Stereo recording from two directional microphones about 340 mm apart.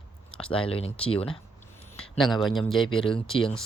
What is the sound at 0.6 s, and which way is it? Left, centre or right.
Speech, centre.